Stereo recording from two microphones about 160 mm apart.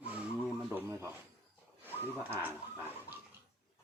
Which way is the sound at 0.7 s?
15° right (ahead or behind).